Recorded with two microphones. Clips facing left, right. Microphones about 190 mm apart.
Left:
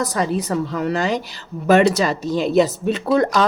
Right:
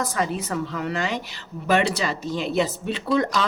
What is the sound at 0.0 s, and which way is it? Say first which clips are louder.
A woman's voice: left 5 dB; 40° left (ahead or behind).